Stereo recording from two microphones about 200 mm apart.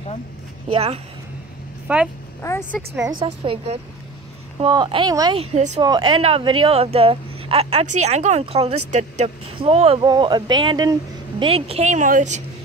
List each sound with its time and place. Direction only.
0.7 s a woman's voice: 30° right (ahead or behind)
1.9 s speech: 5° right (ahead or behind)
2.4 s a woman's voice: 15° left (ahead or behind)
3.0 s speech: 20° right (ahead or behind)
3.3 s a woman's voice: 30° right (ahead or behind)
5.4 s a woman's voice: 35° right (ahead or behind)
5.8 s speech: 20° right (ahead or behind)